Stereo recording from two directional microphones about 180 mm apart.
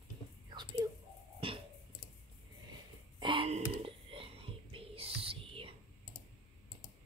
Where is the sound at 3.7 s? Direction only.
30° right (ahead or behind).